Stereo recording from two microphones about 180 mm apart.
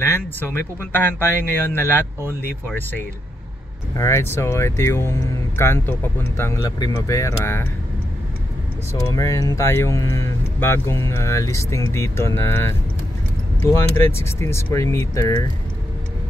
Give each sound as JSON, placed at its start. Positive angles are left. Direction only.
{"t": 0.0, "sound": "speech", "side_deg": 15}
{"t": 3.9, "sound": "speech", "side_deg": 15}
{"t": 8.9, "sound": "speech", "side_deg": 20}